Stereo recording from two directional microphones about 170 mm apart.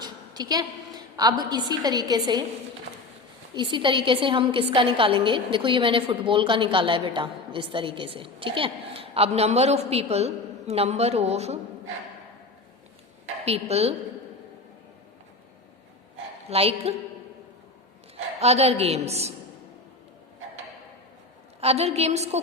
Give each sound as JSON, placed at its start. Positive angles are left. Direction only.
{"t": 0.0, "sound": "a woman's voice", "side_deg": -25}
{"t": 3.5, "sound": "a woman's voice", "side_deg": -25}
{"t": 13.4, "sound": "a woman's voice", "side_deg": -35}
{"t": 16.5, "sound": "a woman's voice", "side_deg": -35}
{"t": 18.3, "sound": "a woman's voice", "side_deg": -40}
{"t": 21.6, "sound": "a woman's voice", "side_deg": -35}